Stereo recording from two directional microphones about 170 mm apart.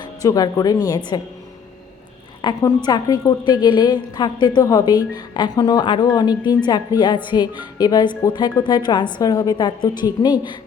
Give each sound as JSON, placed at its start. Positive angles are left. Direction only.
{"t": 0.0, "sound": "a woman's voice", "side_deg": 20}
{"t": 2.4, "sound": "a woman's voice", "side_deg": 20}